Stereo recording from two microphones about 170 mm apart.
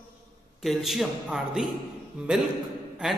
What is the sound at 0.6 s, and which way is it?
A man's voice, centre (ahead or behind).